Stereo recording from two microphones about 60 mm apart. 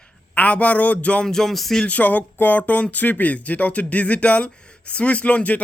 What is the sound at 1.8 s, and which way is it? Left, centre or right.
Speech, left.